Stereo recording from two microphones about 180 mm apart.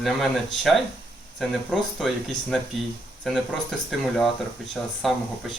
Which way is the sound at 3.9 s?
Centre (ahead or behind).